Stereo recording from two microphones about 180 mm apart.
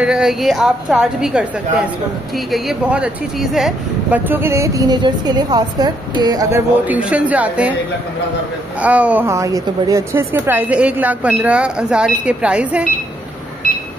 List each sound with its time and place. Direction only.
0.0 s a woman's voice: 5° right (ahead or behind); by 6.6 s 20° right (ahead or behind)
6.9 s speech: 5° right (ahead or behind)
8.8 s speech: 10° right (ahead or behind)